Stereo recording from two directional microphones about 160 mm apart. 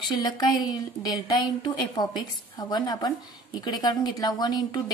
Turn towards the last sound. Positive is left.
turn(degrees=25)  # may be behind; listen again after turning